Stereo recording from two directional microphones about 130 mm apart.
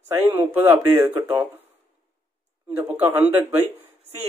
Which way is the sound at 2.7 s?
15° right (ahead or behind).